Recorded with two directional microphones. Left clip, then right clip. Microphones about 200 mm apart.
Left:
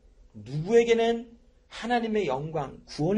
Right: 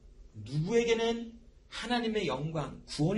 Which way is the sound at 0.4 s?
40° left (ahead or behind).